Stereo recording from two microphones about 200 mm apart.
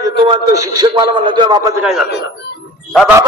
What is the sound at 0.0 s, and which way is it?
A man's voice, 25° right (ahead or behind).